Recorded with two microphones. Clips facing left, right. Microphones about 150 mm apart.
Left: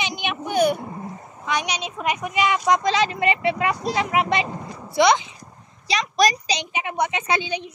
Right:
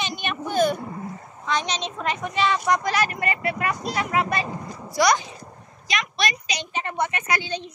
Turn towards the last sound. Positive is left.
turn(degrees=15)  # may be behind; listen again after turning